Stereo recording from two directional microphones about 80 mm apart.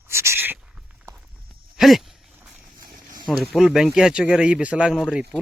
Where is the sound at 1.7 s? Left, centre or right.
Centre.